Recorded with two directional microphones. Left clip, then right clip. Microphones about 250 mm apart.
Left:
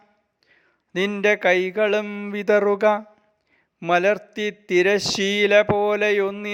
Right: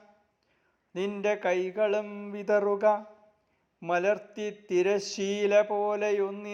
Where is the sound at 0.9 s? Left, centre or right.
Left.